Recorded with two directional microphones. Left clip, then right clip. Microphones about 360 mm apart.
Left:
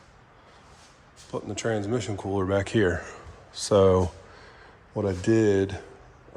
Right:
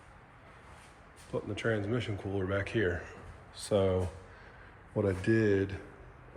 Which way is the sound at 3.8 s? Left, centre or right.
Left.